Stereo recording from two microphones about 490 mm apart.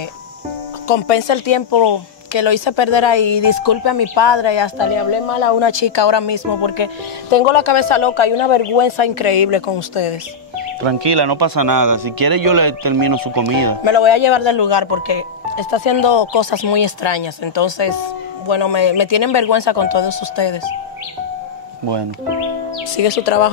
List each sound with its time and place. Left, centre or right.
0.8 s speech: left
7.2 s speech: left
10.8 s speech: right
13.8 s speech: left
23.0 s speech: left